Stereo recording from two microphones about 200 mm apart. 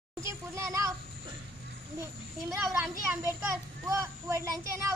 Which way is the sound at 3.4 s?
15° right (ahead or behind).